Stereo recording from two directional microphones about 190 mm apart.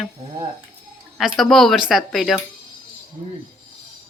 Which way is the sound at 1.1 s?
Centre (ahead or behind).